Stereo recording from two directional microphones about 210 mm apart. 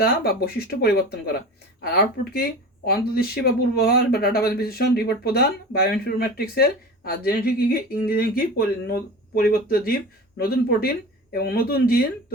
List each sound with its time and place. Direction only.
0.0 s speech: 45° left (ahead or behind)